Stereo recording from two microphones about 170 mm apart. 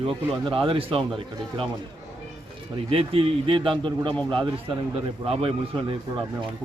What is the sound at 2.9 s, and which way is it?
Speech, 35° right (ahead or behind).